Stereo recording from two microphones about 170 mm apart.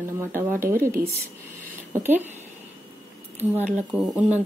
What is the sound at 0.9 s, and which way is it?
Speech, 70° right (ahead or behind).